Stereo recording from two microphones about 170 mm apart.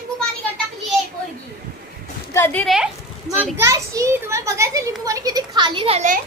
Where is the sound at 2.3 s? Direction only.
10° left (ahead or behind).